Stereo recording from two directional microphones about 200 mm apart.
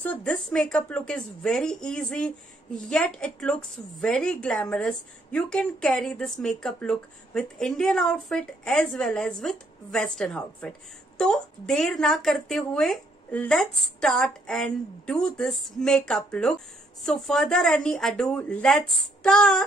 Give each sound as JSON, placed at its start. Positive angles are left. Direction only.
{"t": 0.0, "sound": "a woman's voice", "side_deg": 5}